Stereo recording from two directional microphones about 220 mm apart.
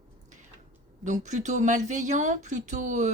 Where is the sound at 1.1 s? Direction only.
35° right (ahead or behind).